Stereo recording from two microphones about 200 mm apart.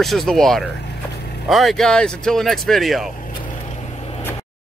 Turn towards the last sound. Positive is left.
turn(degrees=30)  # may be behind; listen again after turning